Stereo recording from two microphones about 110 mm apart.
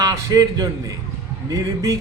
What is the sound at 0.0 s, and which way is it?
Speech, 30° right (ahead or behind).